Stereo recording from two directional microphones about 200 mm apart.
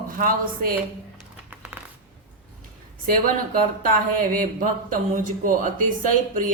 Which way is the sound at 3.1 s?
45° right (ahead or behind).